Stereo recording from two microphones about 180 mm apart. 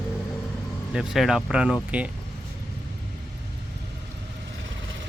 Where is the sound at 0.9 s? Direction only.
5° right (ahead or behind).